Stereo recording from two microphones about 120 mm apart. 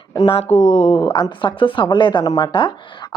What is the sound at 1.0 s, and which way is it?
Speech, 40° left (ahead or behind).